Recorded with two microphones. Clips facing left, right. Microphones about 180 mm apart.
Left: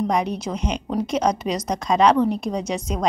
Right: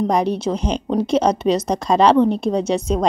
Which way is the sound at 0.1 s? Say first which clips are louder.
Right 5 dB; 30° right (ahead or behind).